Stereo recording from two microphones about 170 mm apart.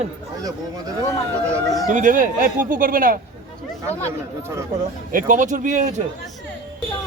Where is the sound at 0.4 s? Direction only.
20° right (ahead or behind).